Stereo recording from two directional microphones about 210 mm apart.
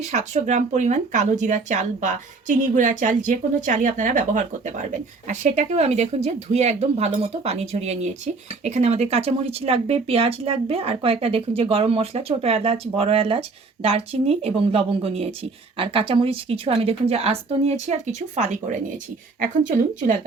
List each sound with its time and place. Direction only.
0.1 s speech: 35° right (ahead or behind)